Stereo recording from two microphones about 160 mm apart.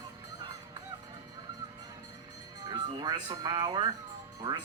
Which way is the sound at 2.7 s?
25° right (ahead or behind).